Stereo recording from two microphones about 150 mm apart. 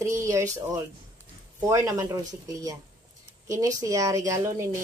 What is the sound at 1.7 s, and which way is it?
Speech, 20° right (ahead or behind).